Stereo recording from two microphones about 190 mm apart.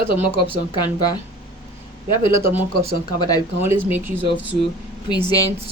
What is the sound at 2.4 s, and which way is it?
Speech, 10° right (ahead or behind).